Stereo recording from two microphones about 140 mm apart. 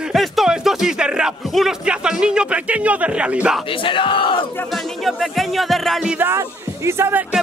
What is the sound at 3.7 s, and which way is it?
Battle cry, 40° left (ahead or behind).